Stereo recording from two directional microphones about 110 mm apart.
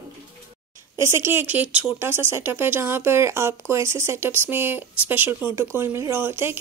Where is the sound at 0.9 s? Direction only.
25° right (ahead or behind).